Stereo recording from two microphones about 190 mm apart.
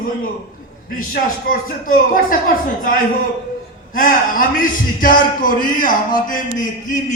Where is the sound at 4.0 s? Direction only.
45° left (ahead or behind).